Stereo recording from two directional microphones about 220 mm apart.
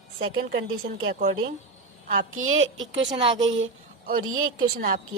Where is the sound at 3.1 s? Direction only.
20° right (ahead or behind).